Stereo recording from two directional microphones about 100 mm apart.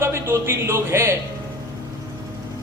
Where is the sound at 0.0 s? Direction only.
25° right (ahead or behind).